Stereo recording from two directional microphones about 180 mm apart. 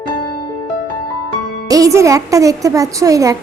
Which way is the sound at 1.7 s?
20° right (ahead or behind).